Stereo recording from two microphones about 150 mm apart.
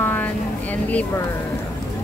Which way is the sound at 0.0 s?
15° left (ahead or behind).